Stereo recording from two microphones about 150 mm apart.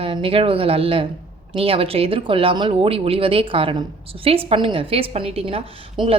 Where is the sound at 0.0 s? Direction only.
40° right (ahead or behind).